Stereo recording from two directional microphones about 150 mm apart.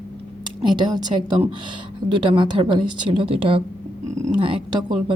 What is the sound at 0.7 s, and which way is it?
A woman's voice, 30° right (ahead or behind).